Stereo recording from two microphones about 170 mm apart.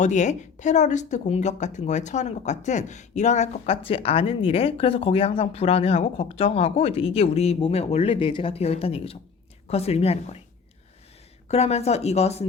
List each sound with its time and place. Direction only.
0.0 s speech: 45° left (ahead or behind)
11.4 s speech: 40° left (ahead or behind)